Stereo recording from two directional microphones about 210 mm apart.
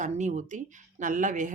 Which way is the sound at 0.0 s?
35° right (ahead or behind).